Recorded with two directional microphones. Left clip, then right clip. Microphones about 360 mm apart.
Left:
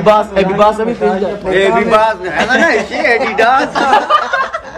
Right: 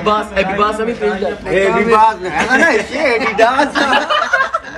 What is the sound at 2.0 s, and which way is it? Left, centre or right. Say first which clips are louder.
Speech: even; centre.